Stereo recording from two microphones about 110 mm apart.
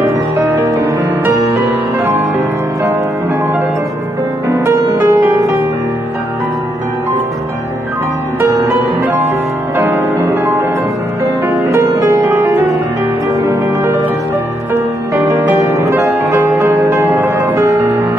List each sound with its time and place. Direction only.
0.4 s music: 30° right (ahead or behind)
4.5 s music: 25° right (ahead or behind)
8.4 s music: 30° right (ahead or behind)
9.8 s music: 20° right (ahead or behind)
11.6 s music: 30° right (ahead or behind)